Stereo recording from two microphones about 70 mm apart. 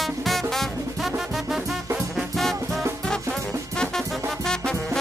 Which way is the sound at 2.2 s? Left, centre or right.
Centre.